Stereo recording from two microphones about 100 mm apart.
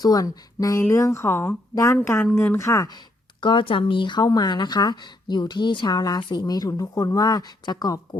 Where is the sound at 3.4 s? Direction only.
55° left (ahead or behind).